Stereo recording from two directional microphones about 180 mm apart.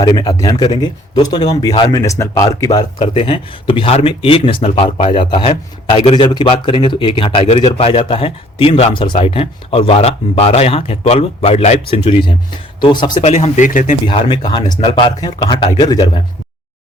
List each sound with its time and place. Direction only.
0.0 s speech: 20° left (ahead or behind)
3.0 s speech: 30° left (ahead or behind)
13.2 s speech: 40° left (ahead or behind)
14.1 s speech: 25° left (ahead or behind)